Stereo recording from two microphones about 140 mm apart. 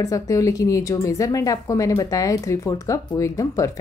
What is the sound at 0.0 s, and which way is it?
A woman's voice, 25° left (ahead or behind).